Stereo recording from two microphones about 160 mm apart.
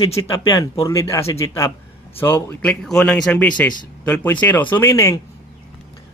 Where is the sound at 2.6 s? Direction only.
5° left (ahead or behind).